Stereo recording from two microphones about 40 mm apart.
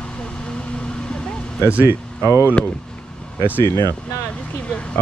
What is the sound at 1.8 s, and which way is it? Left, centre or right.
Speech, right.